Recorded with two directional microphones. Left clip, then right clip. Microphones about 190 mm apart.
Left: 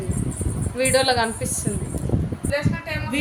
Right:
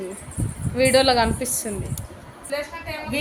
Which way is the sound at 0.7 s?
20° right (ahead or behind).